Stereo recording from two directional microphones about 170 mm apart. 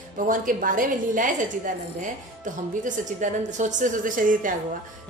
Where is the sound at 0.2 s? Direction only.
55° right (ahead or behind).